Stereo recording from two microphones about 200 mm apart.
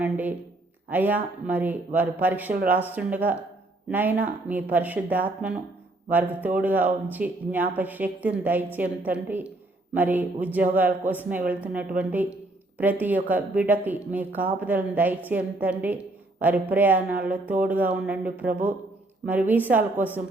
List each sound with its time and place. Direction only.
0.0 s a woman's voice: 10° right (ahead or behind)